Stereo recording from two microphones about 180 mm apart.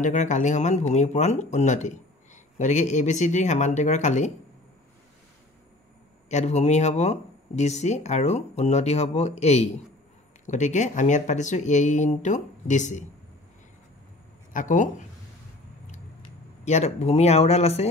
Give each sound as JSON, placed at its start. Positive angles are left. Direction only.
{"t": 0.0, "sound": "speech", "side_deg": 40}
{"t": 6.2, "sound": "speech", "side_deg": 40}
{"t": 14.5, "sound": "speech", "side_deg": 45}
{"t": 16.6, "sound": "speech", "side_deg": 40}